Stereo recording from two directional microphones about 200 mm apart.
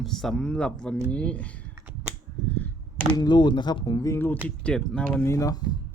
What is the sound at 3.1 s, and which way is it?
Speech, 20° left (ahead or behind).